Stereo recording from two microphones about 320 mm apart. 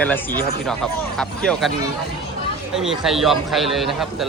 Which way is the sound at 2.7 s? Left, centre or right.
Centre.